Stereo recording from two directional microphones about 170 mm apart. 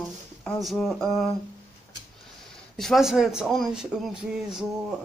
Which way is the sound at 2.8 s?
Centre (ahead or behind).